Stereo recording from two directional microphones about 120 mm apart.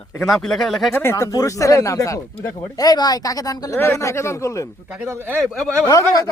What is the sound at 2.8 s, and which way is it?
Speech, 35° left (ahead or behind).